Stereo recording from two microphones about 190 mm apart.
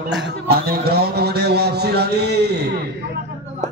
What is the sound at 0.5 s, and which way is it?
A man's voice, 55° right (ahead or behind).